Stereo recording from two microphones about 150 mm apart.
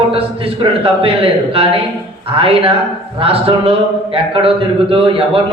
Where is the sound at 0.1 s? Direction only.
40° right (ahead or behind).